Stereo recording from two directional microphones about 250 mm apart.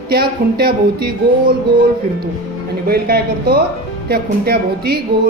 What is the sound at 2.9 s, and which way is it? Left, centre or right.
A man's voice, right.